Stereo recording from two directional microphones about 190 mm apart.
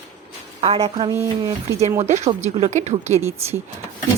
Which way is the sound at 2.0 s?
40° right (ahead or behind).